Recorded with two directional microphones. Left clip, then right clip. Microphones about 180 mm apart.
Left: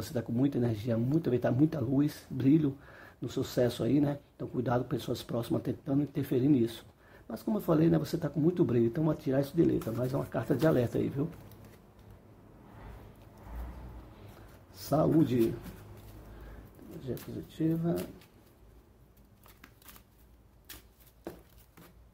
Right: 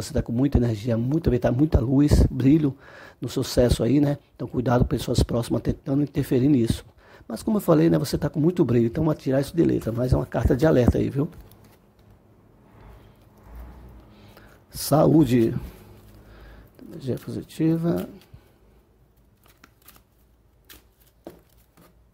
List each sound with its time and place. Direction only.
0.0 s speech: 35° right (ahead or behind)
14.7 s speech: 45° right (ahead or behind)
17.0 s speech: 45° right (ahead or behind)